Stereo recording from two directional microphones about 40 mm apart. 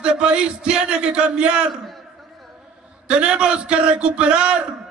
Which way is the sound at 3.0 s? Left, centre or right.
Right.